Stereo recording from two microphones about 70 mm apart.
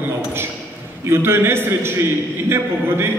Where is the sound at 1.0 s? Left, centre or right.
Right.